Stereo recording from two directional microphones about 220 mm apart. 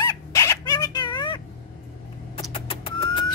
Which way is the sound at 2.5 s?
25° left (ahead or behind).